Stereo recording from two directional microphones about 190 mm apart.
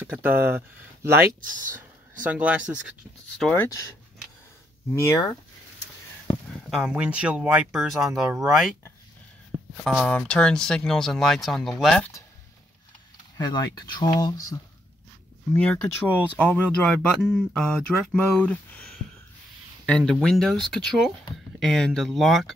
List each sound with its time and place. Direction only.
0.0 s speech: 10° right (ahead or behind)
3.3 s speech: 10° left (ahead or behind)
4.9 s speech: 15° left (ahead or behind)
6.7 s speech: 5° right (ahead or behind)
9.8 s speech: 5° left (ahead or behind)
13.4 s speech: 20° left (ahead or behind)
15.5 s speech: 5° left (ahead or behind)